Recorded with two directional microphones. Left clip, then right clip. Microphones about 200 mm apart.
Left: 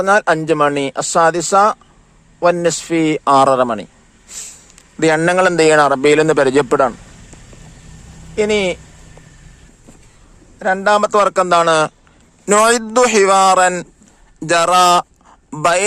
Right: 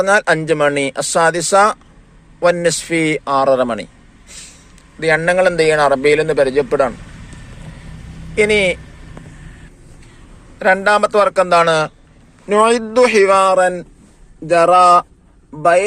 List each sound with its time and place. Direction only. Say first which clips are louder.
0.0 s speech: even; 40° left (ahead or behind)
4.3 s a sound: left 4 dB; 45° left (ahead or behind)
4.9 s a man's voice: left 1 dB; 50° left (ahead or behind)
8.4 s speech: right 2 dB; 40° left (ahead or behind)
10.6 s a man's voice: right 4 dB; 30° left (ahead or behind)
10.8 s a man's voice: left 4 dB; 45° left (ahead or behind)